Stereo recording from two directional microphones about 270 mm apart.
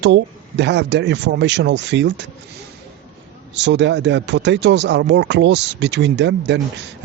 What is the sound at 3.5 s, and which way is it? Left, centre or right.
Speech, right.